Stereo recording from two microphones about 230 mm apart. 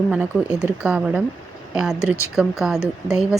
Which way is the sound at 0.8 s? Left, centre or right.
Centre.